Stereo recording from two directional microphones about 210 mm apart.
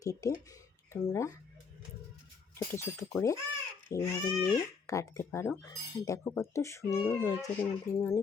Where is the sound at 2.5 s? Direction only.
10° left (ahead or behind).